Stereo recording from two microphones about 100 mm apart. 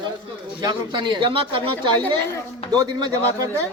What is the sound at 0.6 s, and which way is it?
A man's voice, 45° right (ahead or behind).